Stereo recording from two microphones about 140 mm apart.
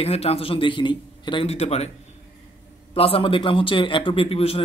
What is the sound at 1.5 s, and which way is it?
Speech, 50° left (ahead or behind).